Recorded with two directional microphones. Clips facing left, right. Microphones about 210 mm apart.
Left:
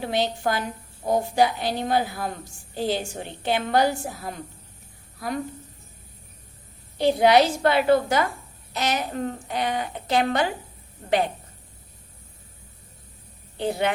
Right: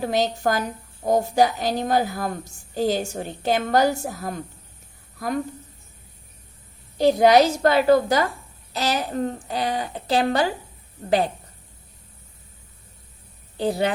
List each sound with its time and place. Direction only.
0.0 s a woman's voice: 40° right (ahead or behind)
7.0 s a woman's voice: 40° right (ahead or behind)
13.6 s a woman's voice: 35° right (ahead or behind)